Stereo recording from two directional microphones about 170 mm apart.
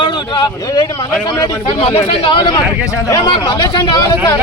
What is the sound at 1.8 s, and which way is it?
A man's voice, 35° left (ahead or behind).